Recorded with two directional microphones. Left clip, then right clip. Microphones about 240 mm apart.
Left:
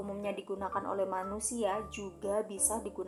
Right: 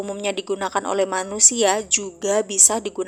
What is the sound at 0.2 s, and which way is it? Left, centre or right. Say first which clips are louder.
A woman's voice: right 13 dB; right.